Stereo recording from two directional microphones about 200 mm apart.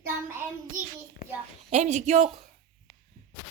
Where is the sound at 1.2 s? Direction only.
50° left (ahead or behind).